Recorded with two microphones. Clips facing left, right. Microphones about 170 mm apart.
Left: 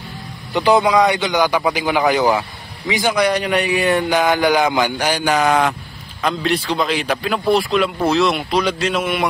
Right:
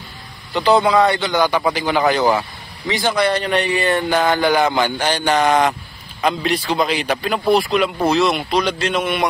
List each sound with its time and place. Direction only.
0.5 s a man's voice: 15° left (ahead or behind)